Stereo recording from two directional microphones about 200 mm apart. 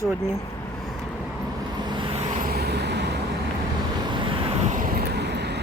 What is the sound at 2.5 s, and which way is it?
Vehicle, 50° right (ahead or behind).